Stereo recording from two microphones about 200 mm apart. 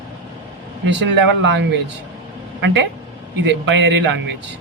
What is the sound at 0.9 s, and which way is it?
Speech, 60° right (ahead or behind).